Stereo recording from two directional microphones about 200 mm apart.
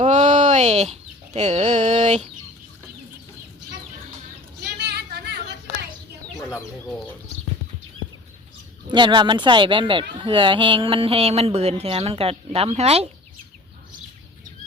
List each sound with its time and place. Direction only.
0.0 s chicken: 35° right (ahead or behind)
4.8 s a sound: 55° right (ahead or behind)
8.9 s speech: 25° right (ahead or behind)